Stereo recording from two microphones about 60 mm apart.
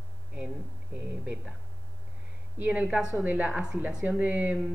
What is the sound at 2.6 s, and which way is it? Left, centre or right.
Speech, right.